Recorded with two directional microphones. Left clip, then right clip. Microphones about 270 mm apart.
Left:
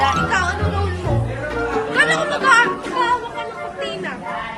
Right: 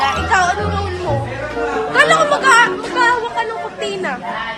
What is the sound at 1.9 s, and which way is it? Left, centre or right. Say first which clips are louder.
Music: right 6 dB; centre.